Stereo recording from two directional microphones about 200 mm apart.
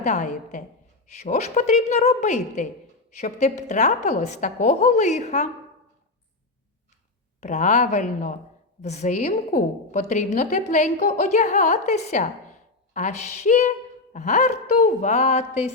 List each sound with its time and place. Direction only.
0.0 s a woman's voice: 35° left (ahead or behind)
7.4 s a woman's voice: 35° left (ahead or behind)